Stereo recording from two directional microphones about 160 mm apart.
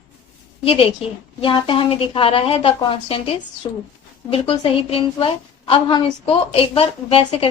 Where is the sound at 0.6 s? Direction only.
35° left (ahead or behind).